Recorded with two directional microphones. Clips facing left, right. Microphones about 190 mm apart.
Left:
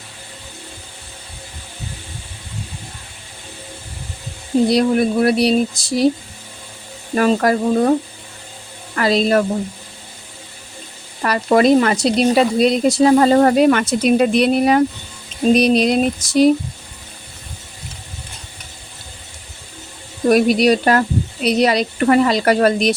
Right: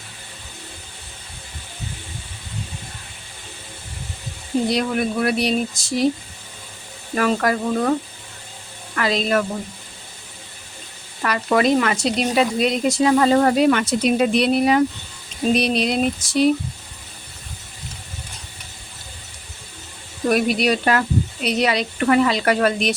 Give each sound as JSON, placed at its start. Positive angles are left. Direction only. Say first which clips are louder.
{"t": 4.7, "sound": "speech", "louder": "left 6 dB", "side_deg": 35}
{"t": 7.2, "sound": "speech", "louder": "left 4 dB", "side_deg": 35}
{"t": 9.0, "sound": "speech", "louder": "left 5 dB", "side_deg": 35}
{"t": 11.2, "sound": "speech", "louder": "left 5 dB", "side_deg": 35}
{"t": 20.3, "sound": "speech", "louder": "left 6 dB", "side_deg": 40}